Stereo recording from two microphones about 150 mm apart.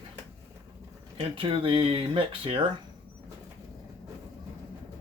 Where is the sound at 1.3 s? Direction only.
35° right (ahead or behind).